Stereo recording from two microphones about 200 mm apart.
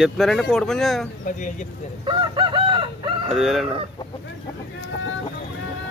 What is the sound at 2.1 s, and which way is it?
Chicken, 25° right (ahead or behind).